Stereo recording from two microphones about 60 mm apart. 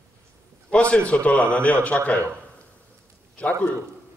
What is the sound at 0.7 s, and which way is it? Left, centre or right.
Speech, centre.